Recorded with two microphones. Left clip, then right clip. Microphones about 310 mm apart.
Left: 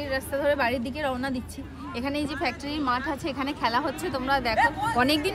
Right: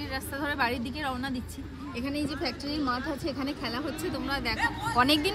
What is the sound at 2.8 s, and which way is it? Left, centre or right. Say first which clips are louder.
Speech: left 5 dB; left.